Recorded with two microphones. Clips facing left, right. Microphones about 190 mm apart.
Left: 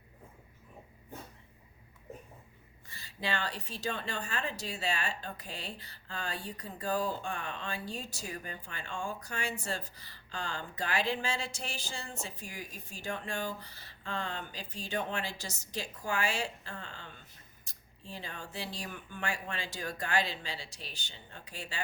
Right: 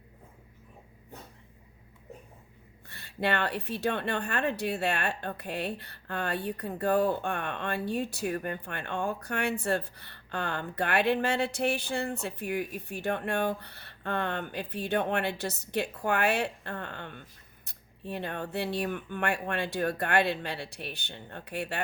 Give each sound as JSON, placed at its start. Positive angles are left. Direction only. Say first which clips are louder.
{"t": 2.8, "sound": "a woman's voice", "louder": "right 8 dB", "side_deg": -60}